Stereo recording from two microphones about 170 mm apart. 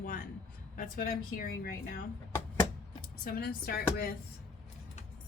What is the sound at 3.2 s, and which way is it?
Speech, 60° left (ahead or behind).